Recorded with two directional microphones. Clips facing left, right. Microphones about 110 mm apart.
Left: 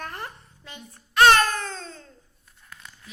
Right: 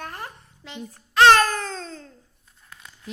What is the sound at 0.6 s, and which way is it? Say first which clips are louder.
Child singing: right 7 dB; 90° right.